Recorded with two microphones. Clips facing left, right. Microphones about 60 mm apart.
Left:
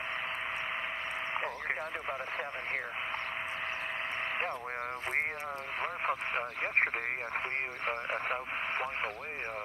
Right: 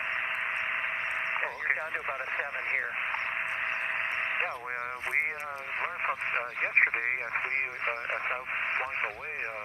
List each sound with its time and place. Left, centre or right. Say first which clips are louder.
1.3 s speech: right 3 dB; right
5.8 s speech: right 2 dB; right